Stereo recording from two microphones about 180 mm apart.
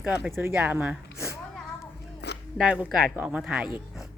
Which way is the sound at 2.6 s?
5° right (ahead or behind).